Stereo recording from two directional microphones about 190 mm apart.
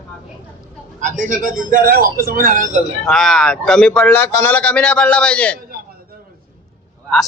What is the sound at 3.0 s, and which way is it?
Speech, centre (ahead or behind).